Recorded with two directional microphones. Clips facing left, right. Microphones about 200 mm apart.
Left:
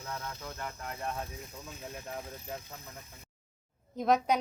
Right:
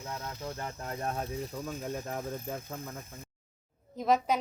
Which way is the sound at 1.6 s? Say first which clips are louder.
Right 7 dB; 40° right (ahead or behind).